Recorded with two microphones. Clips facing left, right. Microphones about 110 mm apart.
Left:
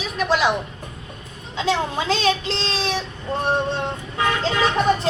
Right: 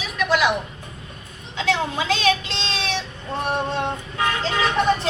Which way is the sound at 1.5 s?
30° left (ahead or behind).